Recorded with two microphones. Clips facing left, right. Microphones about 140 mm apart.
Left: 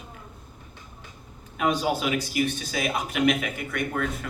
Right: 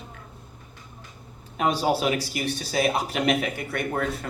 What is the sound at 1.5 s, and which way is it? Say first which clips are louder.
Speech: right 1 dB; 35° right (ahead or behind).